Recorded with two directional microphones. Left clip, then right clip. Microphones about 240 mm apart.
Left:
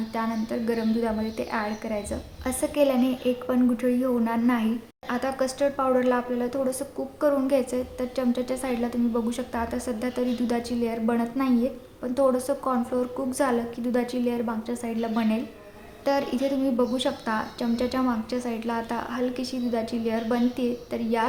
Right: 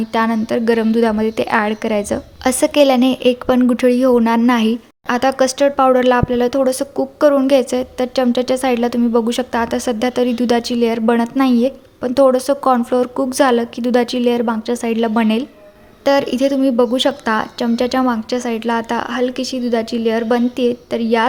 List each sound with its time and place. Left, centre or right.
0.1 s a woman's voice: right